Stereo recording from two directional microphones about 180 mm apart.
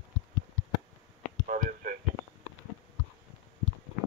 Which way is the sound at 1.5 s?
50° right (ahead or behind).